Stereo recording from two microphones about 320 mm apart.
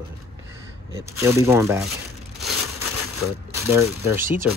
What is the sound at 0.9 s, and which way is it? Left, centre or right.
Speech, centre.